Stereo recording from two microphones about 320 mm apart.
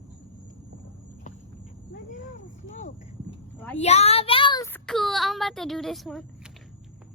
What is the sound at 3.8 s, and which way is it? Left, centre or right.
Child singing, centre.